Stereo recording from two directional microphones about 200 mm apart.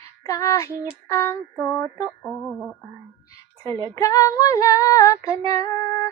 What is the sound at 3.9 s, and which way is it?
Female singing, 15° left (ahead or behind).